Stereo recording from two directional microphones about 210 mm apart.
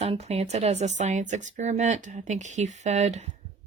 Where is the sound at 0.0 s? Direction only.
30° right (ahead or behind).